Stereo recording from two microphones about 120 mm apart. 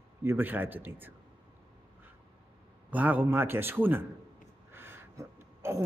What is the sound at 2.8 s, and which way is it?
A man's voice, 15° right (ahead or behind).